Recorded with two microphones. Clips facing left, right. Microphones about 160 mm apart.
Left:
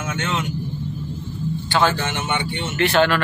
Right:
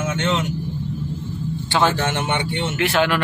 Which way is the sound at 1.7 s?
20° right (ahead or behind).